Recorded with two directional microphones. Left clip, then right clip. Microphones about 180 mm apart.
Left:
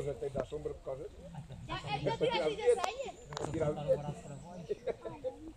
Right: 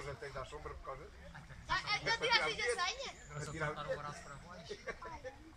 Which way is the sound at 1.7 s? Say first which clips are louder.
Right 1 dB; 45° left (ahead or behind).